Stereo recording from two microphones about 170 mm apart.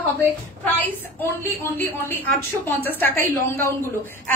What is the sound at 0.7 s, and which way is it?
A woman's voice, 15° left (ahead or behind).